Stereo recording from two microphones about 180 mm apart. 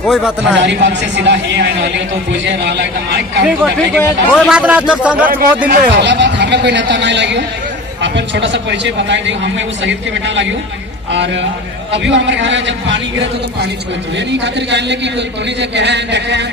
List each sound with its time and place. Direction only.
0.1 s speech: 5° right (ahead or behind)
0.6 s a woman's voice: 80° right
3.9 s speech: 5° right (ahead or behind)
5.2 s speech: 50° right (ahead or behind)
5.7 s a woman's voice: 75° right (ahead or behind); by 13.0 s 90° right
14.1 s a woman's voice: 75° right (ahead or behind)